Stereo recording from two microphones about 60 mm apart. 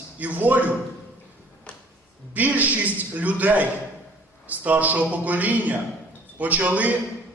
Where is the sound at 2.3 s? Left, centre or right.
Right.